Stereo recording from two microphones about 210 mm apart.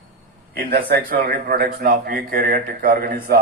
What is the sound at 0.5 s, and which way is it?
A man's voice, 45° right (ahead or behind).